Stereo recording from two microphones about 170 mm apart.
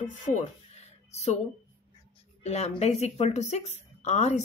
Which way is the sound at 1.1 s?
40° left (ahead or behind).